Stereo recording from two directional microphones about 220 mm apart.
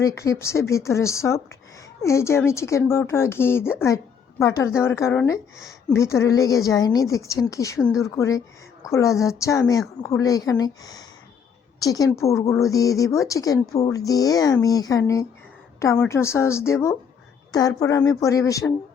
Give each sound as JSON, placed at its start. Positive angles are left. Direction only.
{"t": 0.0, "sound": "a woman's voice", "side_deg": 15}